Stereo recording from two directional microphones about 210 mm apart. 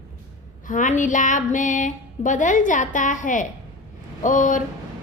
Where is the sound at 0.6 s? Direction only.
40° left (ahead or behind).